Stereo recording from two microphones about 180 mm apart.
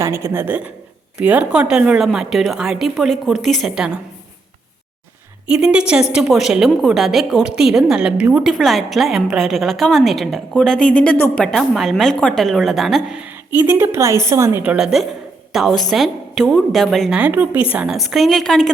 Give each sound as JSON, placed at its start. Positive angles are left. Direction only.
{"t": 0.0, "sound": "a woman's voice", "side_deg": -15}
{"t": 5.5, "sound": "a woman's voice", "side_deg": -5}